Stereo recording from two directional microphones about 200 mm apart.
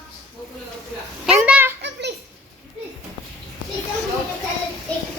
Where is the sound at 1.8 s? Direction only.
60° right (ahead or behind).